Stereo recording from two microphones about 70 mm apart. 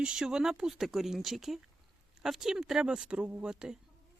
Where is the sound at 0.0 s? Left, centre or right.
Centre.